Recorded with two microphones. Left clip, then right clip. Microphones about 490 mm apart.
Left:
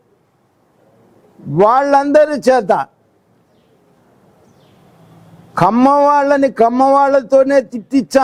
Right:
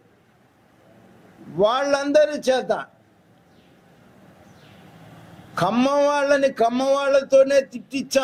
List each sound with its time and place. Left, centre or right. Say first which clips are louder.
1.5 s a man's voice: left 9 dB; left
5.5 s a man's voice: left 9 dB; left